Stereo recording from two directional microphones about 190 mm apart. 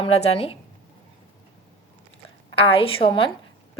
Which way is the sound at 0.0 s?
30° left (ahead or behind).